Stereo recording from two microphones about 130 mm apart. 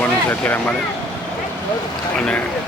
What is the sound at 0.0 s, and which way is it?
Vehicle, 15° left (ahead or behind).